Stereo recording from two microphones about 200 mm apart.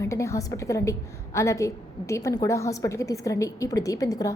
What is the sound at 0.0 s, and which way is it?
A woman's voice, 15° left (ahead or behind).